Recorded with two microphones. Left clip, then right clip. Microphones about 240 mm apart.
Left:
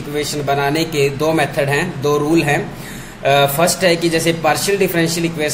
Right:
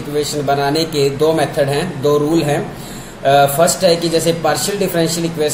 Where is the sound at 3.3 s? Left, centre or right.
Left.